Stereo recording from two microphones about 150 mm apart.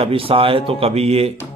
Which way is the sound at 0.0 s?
40° right (ahead or behind).